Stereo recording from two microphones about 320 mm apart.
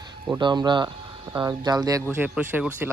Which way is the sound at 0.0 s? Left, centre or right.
Centre.